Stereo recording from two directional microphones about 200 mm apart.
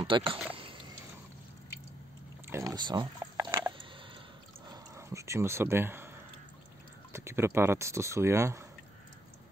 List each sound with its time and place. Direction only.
0.0 s speech: 25° right (ahead or behind)
2.5 s a sound: 20° right (ahead or behind)
7.1 s speech: 15° right (ahead or behind)